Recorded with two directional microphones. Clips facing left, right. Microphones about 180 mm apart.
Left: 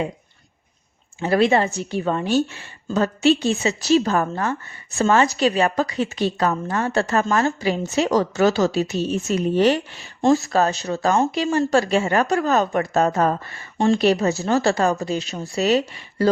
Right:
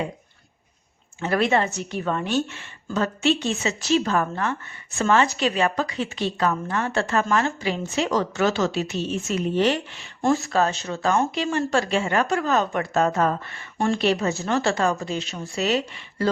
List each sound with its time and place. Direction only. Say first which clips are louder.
1.2 s a woman's voice: left 4 dB; 30° left (ahead or behind)